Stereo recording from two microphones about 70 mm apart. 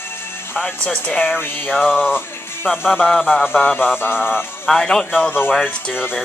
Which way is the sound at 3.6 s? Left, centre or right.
Left.